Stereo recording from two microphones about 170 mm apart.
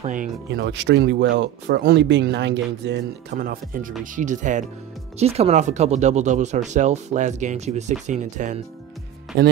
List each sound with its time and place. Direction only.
0.0 s speech: 50° right (ahead or behind)
0.6 s speech: 90° right; by 4.6 s 45° right (ahead or behind)
5.2 s speech: 35° right (ahead or behind)